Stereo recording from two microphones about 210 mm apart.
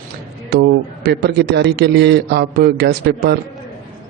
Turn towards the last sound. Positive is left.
turn(degrees=-50)  # may be behind; listen again after turning